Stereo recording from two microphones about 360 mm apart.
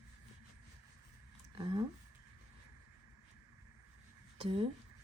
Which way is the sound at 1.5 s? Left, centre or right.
Centre.